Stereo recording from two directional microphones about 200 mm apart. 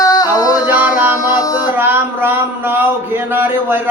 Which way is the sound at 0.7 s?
10° right (ahead or behind).